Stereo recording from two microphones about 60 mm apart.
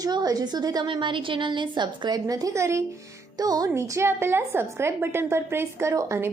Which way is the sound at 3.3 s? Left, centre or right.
Right.